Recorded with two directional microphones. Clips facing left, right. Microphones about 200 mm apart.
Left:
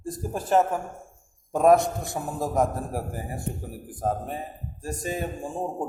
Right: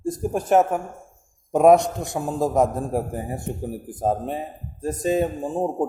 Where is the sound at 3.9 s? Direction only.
25° right (ahead or behind).